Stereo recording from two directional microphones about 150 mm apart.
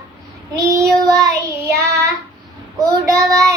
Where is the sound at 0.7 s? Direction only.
20° right (ahead or behind).